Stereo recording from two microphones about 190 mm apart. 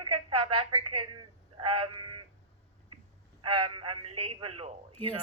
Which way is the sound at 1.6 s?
30° right (ahead or behind).